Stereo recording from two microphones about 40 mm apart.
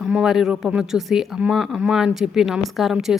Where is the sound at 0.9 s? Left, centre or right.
Centre.